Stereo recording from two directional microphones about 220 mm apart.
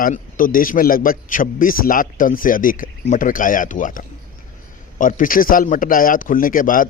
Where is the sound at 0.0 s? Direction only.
40° left (ahead or behind).